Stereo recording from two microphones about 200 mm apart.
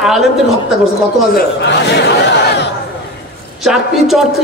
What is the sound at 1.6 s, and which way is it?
Speech, 60° left (ahead or behind).